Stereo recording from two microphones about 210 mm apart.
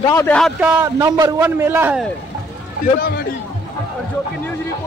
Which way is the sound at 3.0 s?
45° left (ahead or behind).